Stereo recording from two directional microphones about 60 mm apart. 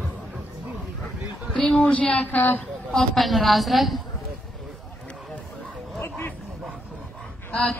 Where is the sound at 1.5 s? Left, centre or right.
Centre.